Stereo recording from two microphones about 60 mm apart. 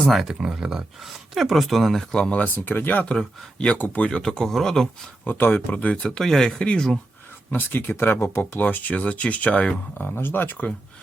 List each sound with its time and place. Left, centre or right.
0.1 s speech: centre
0.3 s speech: centre
0.9 s speech: centre
2.1 s speech: centre
2.6 s speech: left
4.1 s speech: centre
5.2 s speech: left
6.0 s speech: centre
7.5 s speech: left
8.6 s speech: left